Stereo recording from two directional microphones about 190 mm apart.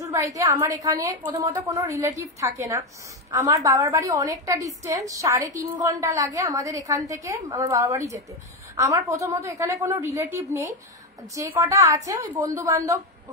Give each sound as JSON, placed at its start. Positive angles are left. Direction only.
{"t": 0.0, "sound": "a woman's voice", "side_deg": -15}